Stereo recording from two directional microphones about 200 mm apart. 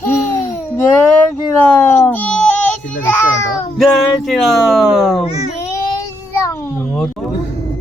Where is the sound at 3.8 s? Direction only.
Centre (ahead or behind).